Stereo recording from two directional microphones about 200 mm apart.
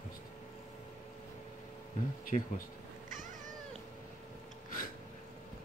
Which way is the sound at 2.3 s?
35° left (ahead or behind).